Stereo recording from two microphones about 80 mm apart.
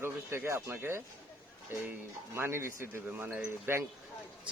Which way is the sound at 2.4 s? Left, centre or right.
Right.